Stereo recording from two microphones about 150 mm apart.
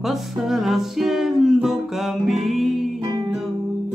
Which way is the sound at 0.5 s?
Centre (ahead or behind).